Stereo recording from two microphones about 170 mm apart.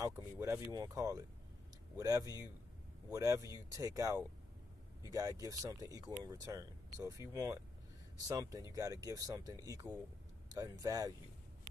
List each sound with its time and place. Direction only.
0.0 s speech: 15° right (ahead or behind)